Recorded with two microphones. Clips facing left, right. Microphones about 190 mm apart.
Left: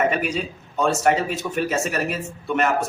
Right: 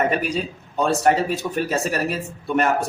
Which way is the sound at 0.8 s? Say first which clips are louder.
Right 1 dB; 35° right (ahead or behind).